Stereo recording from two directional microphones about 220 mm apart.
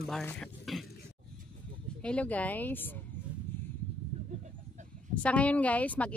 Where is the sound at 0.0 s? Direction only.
5° left (ahead or behind).